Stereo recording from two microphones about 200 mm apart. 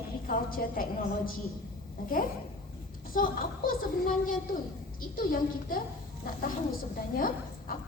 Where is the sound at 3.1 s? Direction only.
45° left (ahead or behind).